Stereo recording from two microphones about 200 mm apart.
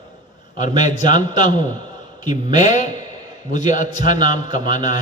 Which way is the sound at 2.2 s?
20° right (ahead or behind).